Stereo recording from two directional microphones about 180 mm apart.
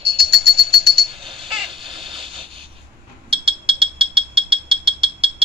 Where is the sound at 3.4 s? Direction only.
30° right (ahead or behind).